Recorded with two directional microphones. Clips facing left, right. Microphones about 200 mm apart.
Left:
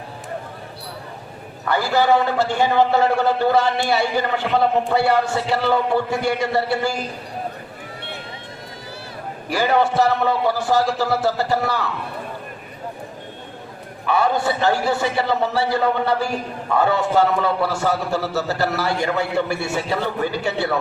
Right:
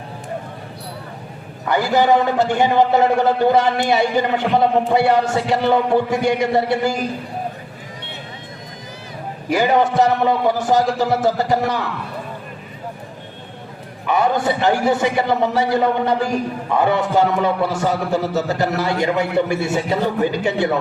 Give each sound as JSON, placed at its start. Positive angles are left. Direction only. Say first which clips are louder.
{"t": 1.6, "sound": "a man's voice", "louder": "right 2 dB", "side_deg": -15}
{"t": 9.5, "sound": "a man's voice", "louder": "right 2 dB", "side_deg": -15}
{"t": 14.1, "sound": "a man's voice", "louder": "right 2 dB", "side_deg": -15}